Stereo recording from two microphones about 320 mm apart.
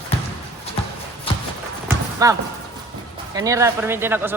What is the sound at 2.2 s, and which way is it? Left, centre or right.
Speech, centre.